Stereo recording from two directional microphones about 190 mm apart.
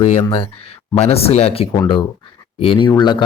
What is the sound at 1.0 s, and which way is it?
Speech, 30° left (ahead or behind).